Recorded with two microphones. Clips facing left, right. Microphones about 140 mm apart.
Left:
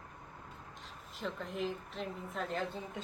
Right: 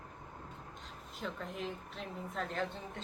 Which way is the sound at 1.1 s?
Centre (ahead or behind).